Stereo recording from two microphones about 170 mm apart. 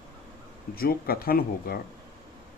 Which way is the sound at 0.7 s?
60° left (ahead or behind).